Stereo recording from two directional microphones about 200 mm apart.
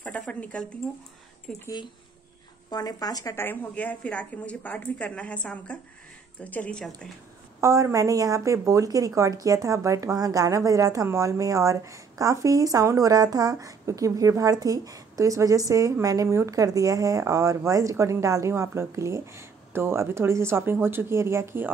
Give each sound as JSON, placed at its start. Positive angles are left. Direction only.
{"t": 0.0, "sound": "a woman's voice", "side_deg": 5}
{"t": 2.7, "sound": "a woman's voice", "side_deg": 20}
{"t": 7.6, "sound": "a woman's voice", "side_deg": -15}